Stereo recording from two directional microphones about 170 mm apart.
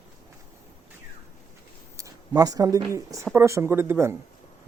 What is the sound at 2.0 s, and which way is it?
Speech, 20° right (ahead or behind).